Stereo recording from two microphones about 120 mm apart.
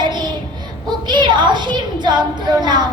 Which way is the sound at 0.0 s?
35° right (ahead or behind).